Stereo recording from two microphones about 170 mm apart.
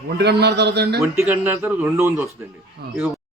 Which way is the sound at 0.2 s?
75° right (ahead or behind).